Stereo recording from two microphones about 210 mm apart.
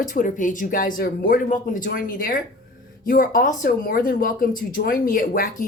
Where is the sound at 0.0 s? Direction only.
40° left (ahead or behind).